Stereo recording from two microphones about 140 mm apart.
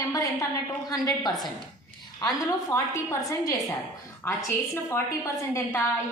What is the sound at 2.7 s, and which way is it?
Speech, 20° left (ahead or behind).